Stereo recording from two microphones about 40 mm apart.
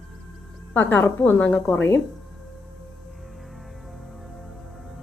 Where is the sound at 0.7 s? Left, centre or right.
Left.